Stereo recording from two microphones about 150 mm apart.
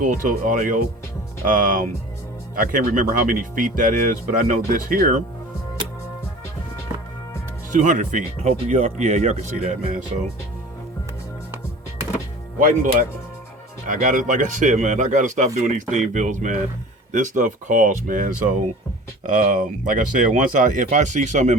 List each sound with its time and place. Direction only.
0.0 s speech: 60° right (ahead or behind)
7.7 s speech: 55° right (ahead or behind)
12.5 s speech: 60° right (ahead or behind)